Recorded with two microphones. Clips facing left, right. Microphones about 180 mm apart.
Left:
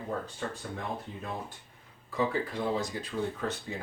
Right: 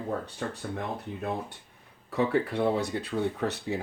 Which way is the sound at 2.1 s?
65° right (ahead or behind).